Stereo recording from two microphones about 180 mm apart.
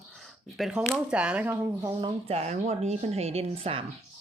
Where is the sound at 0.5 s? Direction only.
5° right (ahead or behind).